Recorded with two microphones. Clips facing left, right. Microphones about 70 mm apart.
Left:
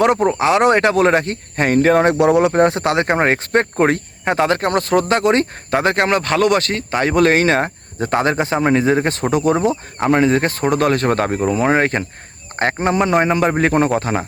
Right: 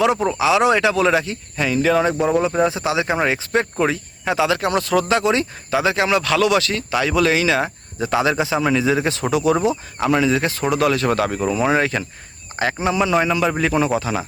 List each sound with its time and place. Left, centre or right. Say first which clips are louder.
0.3 s speech: left 2 dB; left